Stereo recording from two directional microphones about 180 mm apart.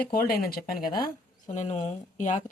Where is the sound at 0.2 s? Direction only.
55° left (ahead or behind).